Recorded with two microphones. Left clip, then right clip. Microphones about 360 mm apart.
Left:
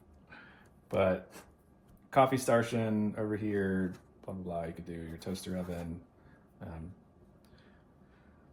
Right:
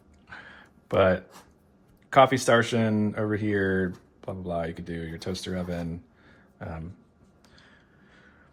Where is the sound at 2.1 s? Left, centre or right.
Right.